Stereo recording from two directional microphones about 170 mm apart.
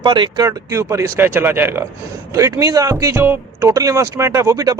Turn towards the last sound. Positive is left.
turn(degrees=-20)  # may be behind; listen again after turning